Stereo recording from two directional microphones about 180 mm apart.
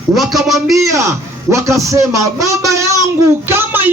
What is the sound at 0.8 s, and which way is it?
A man's voice, 15° right (ahead or behind).